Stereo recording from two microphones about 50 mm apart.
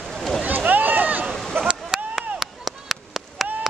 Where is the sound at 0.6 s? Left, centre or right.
Right.